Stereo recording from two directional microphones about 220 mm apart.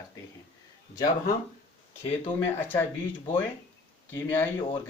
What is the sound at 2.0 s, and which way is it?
Speech, 25° left (ahead or behind).